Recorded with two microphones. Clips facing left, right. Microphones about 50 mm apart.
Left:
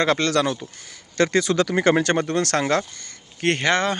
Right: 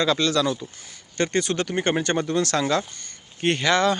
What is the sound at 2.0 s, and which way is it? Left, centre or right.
Speech, left.